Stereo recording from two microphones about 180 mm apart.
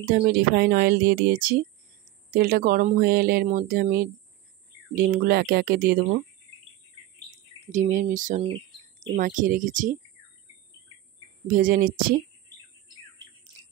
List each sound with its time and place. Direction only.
0.1 s speech: 60° right (ahead or behind)
7.6 s speech: 40° right (ahead or behind)
11.4 s speech: 50° right (ahead or behind)